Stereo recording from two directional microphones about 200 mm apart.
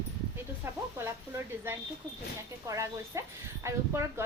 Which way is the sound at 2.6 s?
15° right (ahead or behind).